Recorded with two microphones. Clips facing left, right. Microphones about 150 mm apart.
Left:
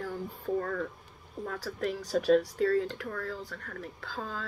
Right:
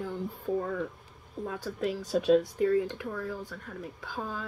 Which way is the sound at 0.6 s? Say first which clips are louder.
Right 1 dB; 15° right (ahead or behind).